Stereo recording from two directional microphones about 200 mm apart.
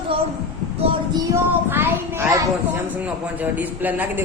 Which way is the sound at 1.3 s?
10° right (ahead or behind).